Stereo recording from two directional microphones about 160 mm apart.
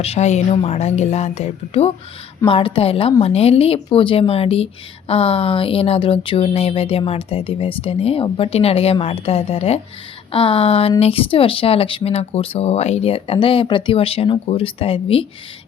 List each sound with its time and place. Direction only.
0.0 s a woman's voice: 40° left (ahead or behind)